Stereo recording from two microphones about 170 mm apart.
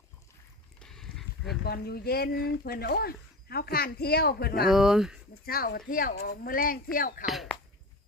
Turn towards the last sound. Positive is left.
turn(degrees=0)  # may be behind; listen again after turning